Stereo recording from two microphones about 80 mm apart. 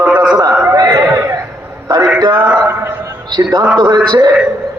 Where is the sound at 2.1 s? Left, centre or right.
Right.